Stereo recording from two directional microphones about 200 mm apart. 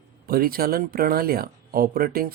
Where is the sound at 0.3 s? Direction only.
50° right (ahead or behind).